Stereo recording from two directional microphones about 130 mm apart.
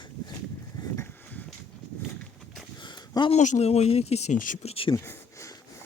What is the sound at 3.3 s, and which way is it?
Speech, 65° left (ahead or behind).